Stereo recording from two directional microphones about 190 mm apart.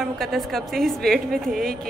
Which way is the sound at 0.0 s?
Centre (ahead or behind).